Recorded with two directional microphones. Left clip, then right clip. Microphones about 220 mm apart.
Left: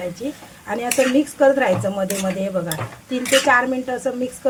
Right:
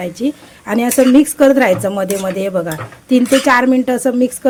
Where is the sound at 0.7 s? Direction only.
45° right (ahead or behind).